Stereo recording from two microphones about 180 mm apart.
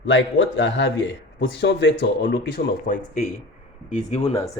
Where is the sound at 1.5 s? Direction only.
75° left (ahead or behind).